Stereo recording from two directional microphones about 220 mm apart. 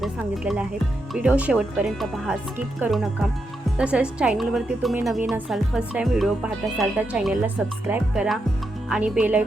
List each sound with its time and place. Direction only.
0.0 s a woman's voice: 5° right (ahead or behind)